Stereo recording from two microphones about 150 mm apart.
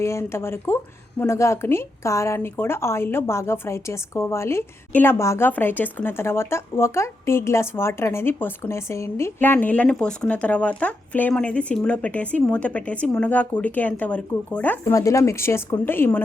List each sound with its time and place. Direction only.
0.0 s speech: 15° left (ahead or behind)
14.9 s speech: 20° left (ahead or behind)